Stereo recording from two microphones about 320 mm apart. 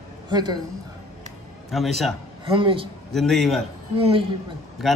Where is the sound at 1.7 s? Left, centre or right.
Centre.